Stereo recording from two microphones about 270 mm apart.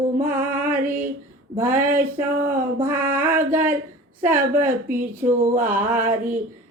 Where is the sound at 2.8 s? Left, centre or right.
Centre.